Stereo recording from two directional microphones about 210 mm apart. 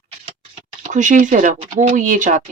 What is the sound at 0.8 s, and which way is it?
Speech, 35° right (ahead or behind).